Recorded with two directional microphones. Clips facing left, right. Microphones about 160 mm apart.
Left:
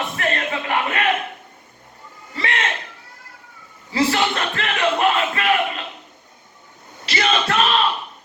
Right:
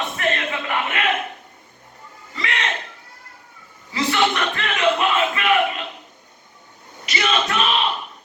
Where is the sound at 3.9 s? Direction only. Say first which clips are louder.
Left 1 dB; 35° left (ahead or behind).